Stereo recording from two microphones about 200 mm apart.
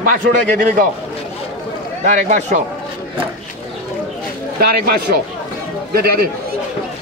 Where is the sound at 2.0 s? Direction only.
35° right (ahead or behind).